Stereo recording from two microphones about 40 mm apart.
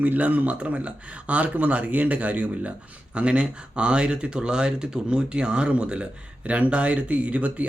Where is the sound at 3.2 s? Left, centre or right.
Right.